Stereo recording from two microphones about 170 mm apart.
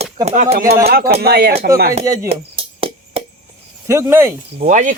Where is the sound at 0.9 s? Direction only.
65° right (ahead or behind).